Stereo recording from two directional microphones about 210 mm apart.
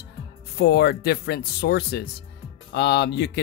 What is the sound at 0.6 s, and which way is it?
Speech, 50° left (ahead or behind).